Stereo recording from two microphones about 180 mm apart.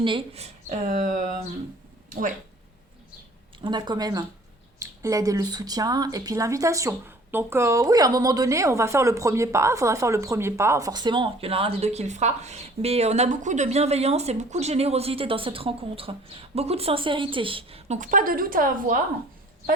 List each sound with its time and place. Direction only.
0.0 s speech: 30° right (ahead or behind); by 1.3 s 45° right (ahead or behind)
3.6 s speech: 25° right (ahead or behind); by 18.9 s 50° right (ahead or behind)